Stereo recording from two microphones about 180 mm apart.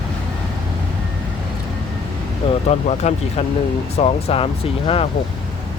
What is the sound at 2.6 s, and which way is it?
Speech, 35° left (ahead or behind).